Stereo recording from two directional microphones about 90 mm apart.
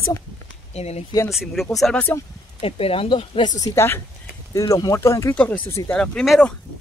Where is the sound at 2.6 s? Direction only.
90° left; by 3.5 s 75° left (ahead or behind).